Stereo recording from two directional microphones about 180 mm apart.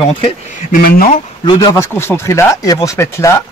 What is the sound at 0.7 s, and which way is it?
Speech, 50° left (ahead or behind).